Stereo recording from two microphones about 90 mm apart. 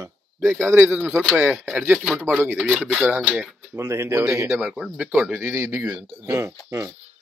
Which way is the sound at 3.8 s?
30° right (ahead or behind).